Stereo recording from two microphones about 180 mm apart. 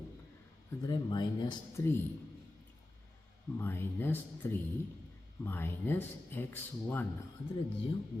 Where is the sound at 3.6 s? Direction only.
10° left (ahead or behind).